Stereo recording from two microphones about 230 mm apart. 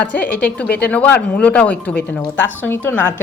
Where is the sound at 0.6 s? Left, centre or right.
Left.